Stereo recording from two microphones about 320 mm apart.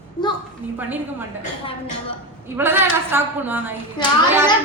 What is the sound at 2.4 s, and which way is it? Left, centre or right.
A woman's voice, centre.